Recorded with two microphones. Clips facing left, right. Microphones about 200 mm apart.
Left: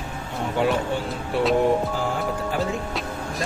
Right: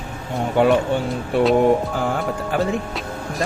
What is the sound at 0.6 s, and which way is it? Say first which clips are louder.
Music: right 6 dB; 60° right (ahead or behind).